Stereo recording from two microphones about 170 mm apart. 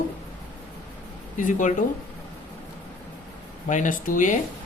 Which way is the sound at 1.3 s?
50° left (ahead or behind).